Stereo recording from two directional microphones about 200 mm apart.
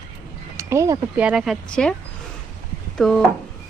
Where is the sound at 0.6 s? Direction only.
15° right (ahead or behind); by 1.9 s 5° left (ahead or behind).